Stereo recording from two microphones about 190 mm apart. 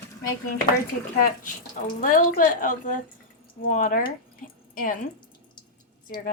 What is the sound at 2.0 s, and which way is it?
Speech, 45° left (ahead or behind).